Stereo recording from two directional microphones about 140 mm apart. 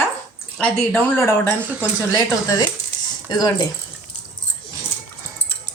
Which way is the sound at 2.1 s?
25° left (ahead or behind).